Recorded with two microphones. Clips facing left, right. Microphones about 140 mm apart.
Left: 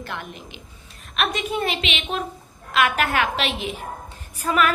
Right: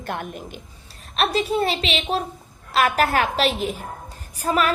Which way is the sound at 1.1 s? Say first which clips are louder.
Right 4 dB; 35° right (ahead or behind).